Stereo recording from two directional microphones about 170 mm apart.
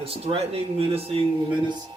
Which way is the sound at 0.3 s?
35° right (ahead or behind).